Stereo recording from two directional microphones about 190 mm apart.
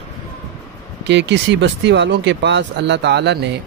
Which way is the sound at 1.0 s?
65° right (ahead or behind).